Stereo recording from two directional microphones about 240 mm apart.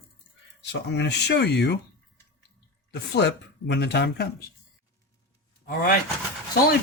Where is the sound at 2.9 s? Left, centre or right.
Left.